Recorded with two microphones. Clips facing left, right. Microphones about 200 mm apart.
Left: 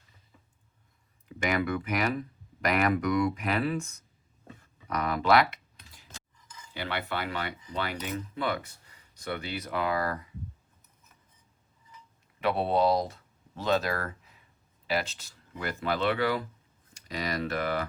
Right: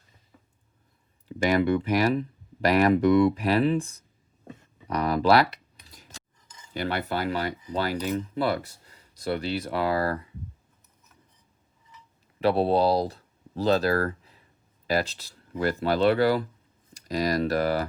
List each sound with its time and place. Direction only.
1.4 s speech: 30° right (ahead or behind)
4.4 s computer keyboard: 30° right (ahead or behind)
6.7 s speech: 40° right (ahead or behind)
12.4 s speech: 35° right (ahead or behind)